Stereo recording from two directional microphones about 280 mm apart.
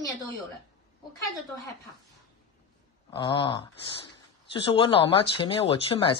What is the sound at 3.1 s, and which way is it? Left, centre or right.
Speech, centre.